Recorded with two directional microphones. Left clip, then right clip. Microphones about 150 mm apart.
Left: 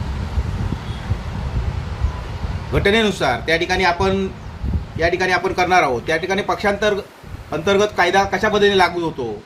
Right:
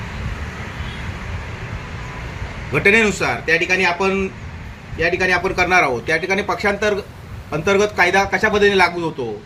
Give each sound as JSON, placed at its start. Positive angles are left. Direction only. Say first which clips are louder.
{"t": 2.7, "sound": "speech", "louder": "right 2 dB", "side_deg": 10}